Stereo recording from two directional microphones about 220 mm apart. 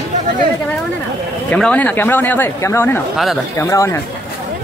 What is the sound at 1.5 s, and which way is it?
Speech, 5° left (ahead or behind).